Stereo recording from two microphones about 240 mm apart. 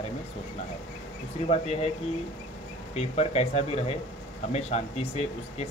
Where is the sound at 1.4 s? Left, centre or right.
Left.